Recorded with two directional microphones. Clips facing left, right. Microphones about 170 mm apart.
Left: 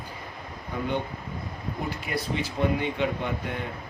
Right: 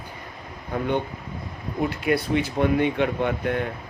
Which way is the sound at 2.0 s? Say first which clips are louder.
Right 9 dB; 60° right (ahead or behind).